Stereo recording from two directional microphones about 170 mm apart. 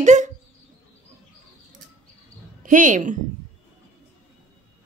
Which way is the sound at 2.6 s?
50° right (ahead or behind).